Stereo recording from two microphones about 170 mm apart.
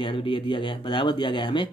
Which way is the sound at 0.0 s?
30° left (ahead or behind).